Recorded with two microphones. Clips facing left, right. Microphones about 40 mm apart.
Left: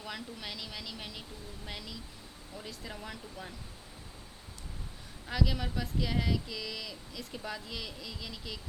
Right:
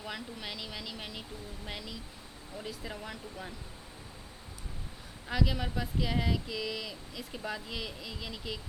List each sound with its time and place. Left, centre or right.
0.0 s speech: centre
5.3 s speech: centre